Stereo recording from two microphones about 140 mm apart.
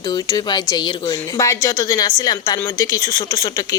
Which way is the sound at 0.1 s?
30° left (ahead or behind).